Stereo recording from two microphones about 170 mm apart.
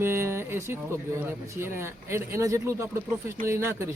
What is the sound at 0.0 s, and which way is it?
A man's voice, 15° right (ahead or behind).